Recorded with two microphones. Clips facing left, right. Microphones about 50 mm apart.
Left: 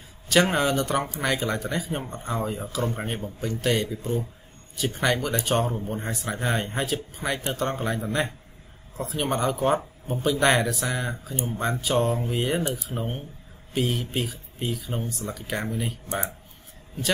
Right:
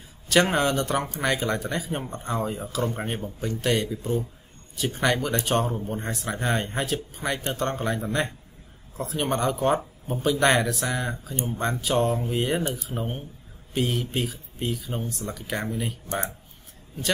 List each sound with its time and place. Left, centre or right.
0.3 s speech: centre